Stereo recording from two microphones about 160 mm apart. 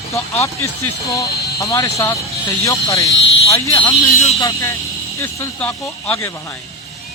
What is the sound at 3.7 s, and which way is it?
Speech, 35° left (ahead or behind).